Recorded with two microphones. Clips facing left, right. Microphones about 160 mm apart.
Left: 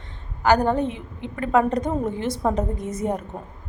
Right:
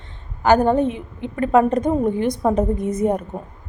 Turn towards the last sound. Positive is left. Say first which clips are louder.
# right 6 dB
turn(degrees=-20)  # may be behind; listen again after turning